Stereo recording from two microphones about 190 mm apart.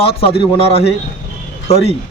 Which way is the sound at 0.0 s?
30° left (ahead or behind).